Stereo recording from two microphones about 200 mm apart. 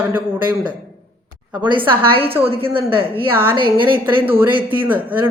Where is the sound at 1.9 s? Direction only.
25° right (ahead or behind).